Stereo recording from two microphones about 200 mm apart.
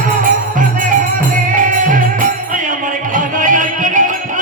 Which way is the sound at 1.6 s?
40° right (ahead or behind).